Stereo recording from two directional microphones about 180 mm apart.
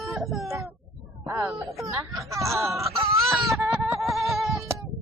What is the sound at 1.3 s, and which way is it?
Speech, 15° right (ahead or behind).